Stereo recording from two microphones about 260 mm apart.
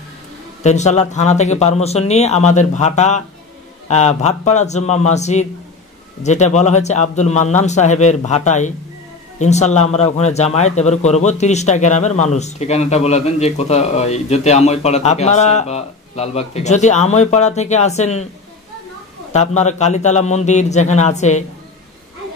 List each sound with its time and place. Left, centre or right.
0.7 s speech: left
19.3 s speech: left